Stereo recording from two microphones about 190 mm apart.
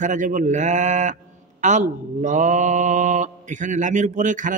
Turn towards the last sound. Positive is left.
turn(degrees=-40)  # may be behind; listen again after turning